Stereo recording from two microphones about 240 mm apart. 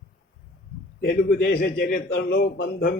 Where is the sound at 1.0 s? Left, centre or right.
Left.